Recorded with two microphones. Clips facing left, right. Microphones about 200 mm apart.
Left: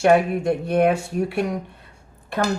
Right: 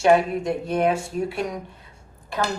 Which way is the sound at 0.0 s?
60° left (ahead or behind).